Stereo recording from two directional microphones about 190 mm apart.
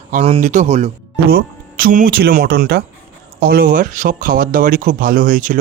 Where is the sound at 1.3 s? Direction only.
45° right (ahead or behind).